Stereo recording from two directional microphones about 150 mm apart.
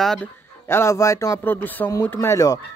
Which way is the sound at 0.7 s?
20° left (ahead or behind).